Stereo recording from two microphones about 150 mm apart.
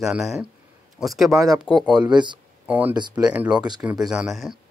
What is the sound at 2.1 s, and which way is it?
Speech, 30° right (ahead or behind).